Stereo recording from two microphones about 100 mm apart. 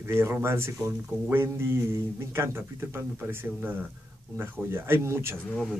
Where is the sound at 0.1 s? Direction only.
25° right (ahead or behind).